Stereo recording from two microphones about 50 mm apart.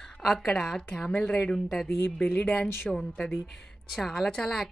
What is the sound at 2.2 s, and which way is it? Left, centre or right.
A woman's voice, left.